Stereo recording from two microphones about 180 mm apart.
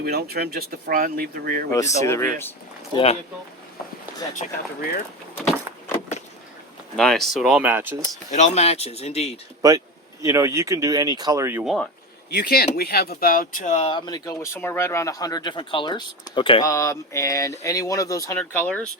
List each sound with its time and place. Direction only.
0.0 s speech: 60° right (ahead or behind)
1.7 s speech: 15° left (ahead or behind)
2.9 s speech: 35° left (ahead or behind)
4.4 s speech: 55° left (ahead or behind)
6.9 s speech: centre (ahead or behind)
8.3 s speech: 40° left (ahead or behind)
9.6 s speech: 20° right (ahead or behind)
11.6 s speech: centre (ahead or behind)
12.3 s speech: 60° left (ahead or behind); by 16.6 s 25° left (ahead or behind)
16.6 s speech: 15° left (ahead or behind)